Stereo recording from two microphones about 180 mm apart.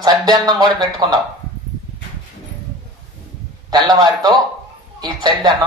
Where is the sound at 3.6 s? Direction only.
25° right (ahead or behind).